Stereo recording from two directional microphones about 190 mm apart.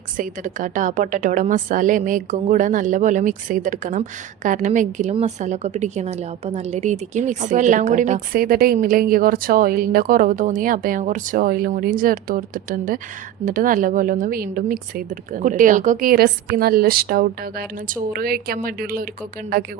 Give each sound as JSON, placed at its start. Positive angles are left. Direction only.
{"t": 0.2, "sound": "a woman's voice", "side_deg": -45}